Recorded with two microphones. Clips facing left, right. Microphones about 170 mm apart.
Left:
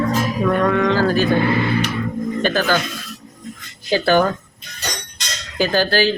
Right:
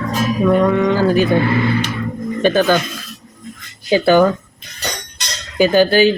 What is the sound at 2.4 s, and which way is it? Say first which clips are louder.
Speech: right 6 dB; 20° right (ahead or behind).